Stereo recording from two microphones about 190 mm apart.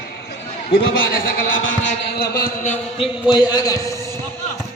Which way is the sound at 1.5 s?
80° left.